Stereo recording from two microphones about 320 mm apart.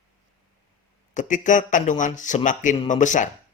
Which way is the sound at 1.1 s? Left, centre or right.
Left.